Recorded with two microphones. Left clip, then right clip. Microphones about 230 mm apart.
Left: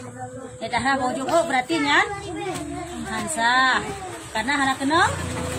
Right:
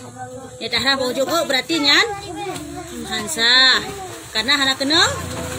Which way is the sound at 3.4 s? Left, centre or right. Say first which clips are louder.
Right 5 dB; left.